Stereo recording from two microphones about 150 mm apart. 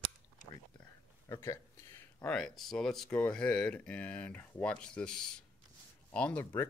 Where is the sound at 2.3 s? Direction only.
5° left (ahead or behind).